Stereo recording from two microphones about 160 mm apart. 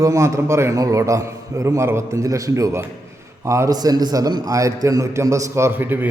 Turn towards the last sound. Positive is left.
turn(degrees=-10)  # may be behind; listen again after turning